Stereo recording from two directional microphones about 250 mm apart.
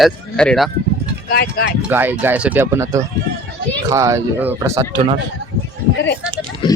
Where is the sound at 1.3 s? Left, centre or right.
Left.